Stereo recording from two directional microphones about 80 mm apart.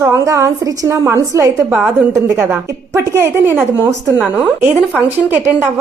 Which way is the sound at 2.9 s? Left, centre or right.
Right.